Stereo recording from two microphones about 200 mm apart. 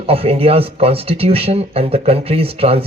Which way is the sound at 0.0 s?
30° right (ahead or behind).